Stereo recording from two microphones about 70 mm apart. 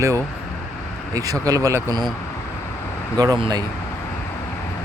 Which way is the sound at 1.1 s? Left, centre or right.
Right.